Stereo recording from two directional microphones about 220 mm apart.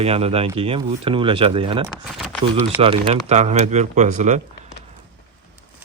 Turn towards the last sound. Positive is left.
turn(degrees=-35)  # may be behind; listen again after turning